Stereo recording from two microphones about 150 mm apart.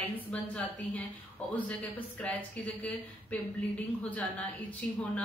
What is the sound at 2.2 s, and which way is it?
A woman's voice, 10° left (ahead or behind).